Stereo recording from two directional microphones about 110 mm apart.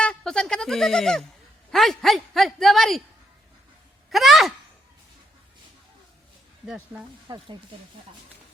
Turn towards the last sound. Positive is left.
turn(degrees=-40)  # may be behind; listen again after turning